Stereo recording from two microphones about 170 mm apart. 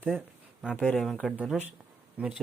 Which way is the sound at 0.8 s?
5° left (ahead or behind).